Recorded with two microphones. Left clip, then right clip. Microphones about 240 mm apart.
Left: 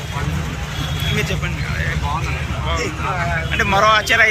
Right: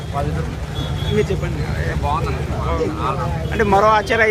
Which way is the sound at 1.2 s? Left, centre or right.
Centre.